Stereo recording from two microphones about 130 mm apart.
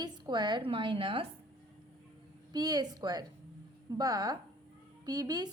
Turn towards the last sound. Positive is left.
turn(degrees=-30)  # may be behind; listen again after turning